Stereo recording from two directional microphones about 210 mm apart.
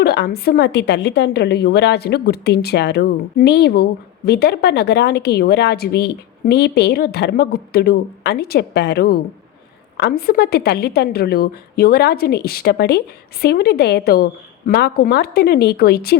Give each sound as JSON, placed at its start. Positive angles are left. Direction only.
{"t": 0.0, "sound": "a woman's voice", "side_deg": 50}